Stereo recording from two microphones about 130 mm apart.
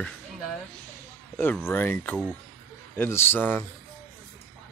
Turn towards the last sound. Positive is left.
turn(degrees=15)  # may be behind; listen again after turning